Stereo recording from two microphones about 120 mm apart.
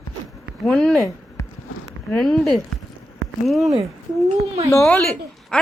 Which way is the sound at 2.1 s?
5° left (ahead or behind).